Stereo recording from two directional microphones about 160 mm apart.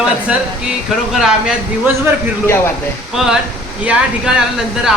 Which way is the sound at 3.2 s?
Centre (ahead or behind).